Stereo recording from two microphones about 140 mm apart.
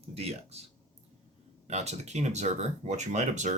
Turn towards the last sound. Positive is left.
turn(degrees=-60)  # may be behind; listen again after turning